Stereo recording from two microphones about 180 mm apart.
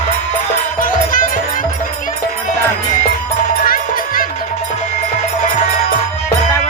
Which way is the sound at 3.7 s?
50° left (ahead or behind).